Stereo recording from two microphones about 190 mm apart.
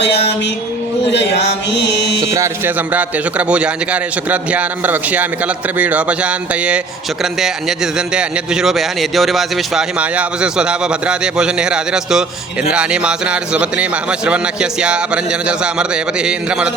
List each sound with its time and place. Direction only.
1.1 s music: 65° left (ahead or behind)
2.3 s speech: 15° right (ahead or behind)
7.9 s a man's voice: 5° right (ahead or behind)